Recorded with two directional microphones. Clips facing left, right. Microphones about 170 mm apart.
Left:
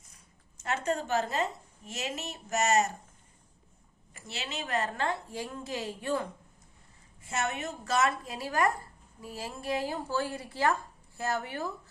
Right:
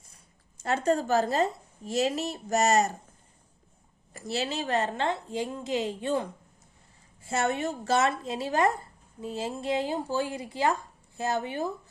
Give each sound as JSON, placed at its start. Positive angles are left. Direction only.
{"t": 0.6, "sound": "a woman's voice", "side_deg": -35}
{"t": 4.1, "sound": "a woman's voice", "side_deg": -35}
{"t": 7.2, "sound": "a woman's voice", "side_deg": -30}